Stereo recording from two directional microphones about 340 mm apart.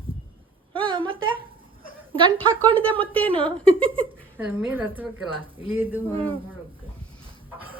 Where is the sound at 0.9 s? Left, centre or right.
Centre.